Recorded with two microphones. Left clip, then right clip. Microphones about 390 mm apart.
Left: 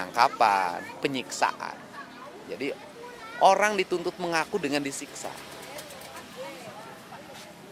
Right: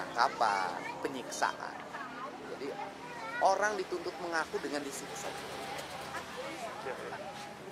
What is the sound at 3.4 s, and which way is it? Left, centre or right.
Speech, left.